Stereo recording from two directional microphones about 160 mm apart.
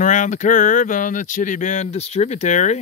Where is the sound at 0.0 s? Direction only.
50° left (ahead or behind).